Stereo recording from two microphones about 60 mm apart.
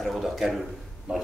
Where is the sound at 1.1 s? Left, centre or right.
Centre.